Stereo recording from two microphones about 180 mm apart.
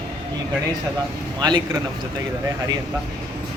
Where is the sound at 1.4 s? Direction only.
20° right (ahead or behind).